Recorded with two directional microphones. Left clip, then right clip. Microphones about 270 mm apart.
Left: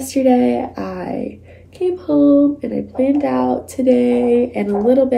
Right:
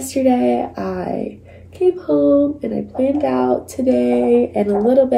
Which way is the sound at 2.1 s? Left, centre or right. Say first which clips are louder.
Left 2 dB; left.